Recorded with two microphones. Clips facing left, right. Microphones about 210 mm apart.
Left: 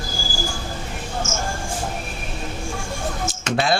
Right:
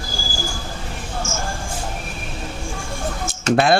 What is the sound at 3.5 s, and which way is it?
Speech, 55° right (ahead or behind).